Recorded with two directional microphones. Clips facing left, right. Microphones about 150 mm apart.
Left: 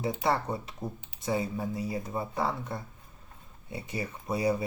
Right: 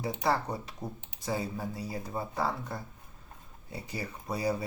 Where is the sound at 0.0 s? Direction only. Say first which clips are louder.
Left 1 dB; 25° left (ahead or behind).